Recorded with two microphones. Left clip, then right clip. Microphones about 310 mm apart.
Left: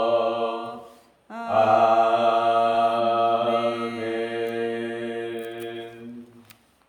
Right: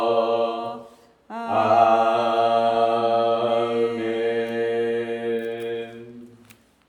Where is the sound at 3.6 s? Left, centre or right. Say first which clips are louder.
Right 4 dB; centre.